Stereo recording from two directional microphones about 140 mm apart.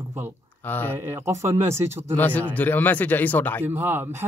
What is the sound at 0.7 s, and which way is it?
Speech, 15° left (ahead or behind).